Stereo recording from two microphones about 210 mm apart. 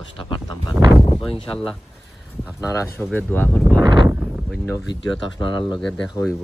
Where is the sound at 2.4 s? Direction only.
15° left (ahead or behind).